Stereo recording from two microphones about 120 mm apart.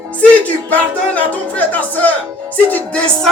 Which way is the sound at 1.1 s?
15° left (ahead or behind).